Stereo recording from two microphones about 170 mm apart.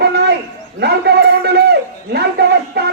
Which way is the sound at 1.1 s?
70° right (ahead or behind).